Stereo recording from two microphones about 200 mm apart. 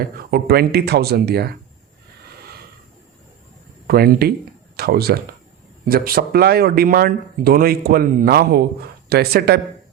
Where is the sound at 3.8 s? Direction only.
50° right (ahead or behind).